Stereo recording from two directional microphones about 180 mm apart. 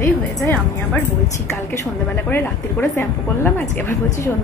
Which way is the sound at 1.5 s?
10° left (ahead or behind).